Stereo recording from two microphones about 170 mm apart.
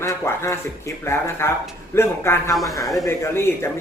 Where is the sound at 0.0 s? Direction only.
15° left (ahead or behind).